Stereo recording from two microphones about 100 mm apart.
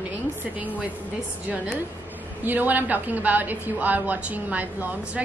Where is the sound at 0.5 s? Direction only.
15° right (ahead or behind).